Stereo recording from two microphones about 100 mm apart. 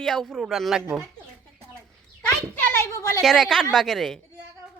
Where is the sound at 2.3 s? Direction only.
20° left (ahead or behind).